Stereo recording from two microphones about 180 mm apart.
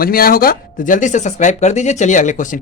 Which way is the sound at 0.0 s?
55° left (ahead or behind).